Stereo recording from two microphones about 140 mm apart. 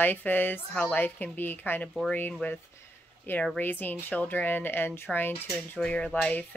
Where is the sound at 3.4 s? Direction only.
10° left (ahead or behind).